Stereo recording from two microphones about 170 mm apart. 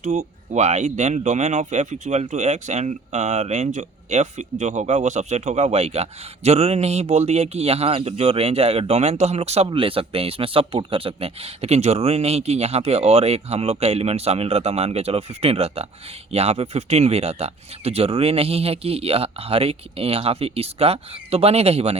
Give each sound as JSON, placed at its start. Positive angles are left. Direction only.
{"t": 0.0, "sound": "speech", "side_deg": -45}